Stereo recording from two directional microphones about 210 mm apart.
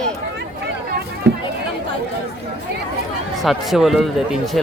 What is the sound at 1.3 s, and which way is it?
Chatter, 55° right (ahead or behind).